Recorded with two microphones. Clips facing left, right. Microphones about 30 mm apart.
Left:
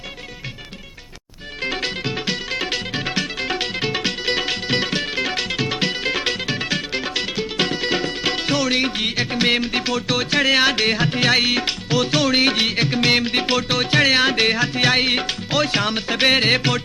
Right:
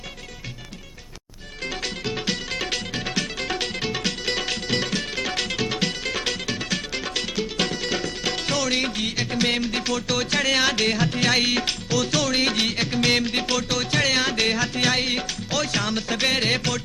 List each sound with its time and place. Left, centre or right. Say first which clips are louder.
1.6 s music: left 5 dB; left
2.1 s music: left 3 dB; centre
11.9 s music: left 5 dB; left